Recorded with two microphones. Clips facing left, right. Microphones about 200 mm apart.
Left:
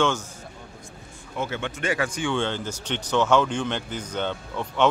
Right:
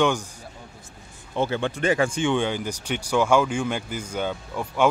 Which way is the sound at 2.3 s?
15° right (ahead or behind).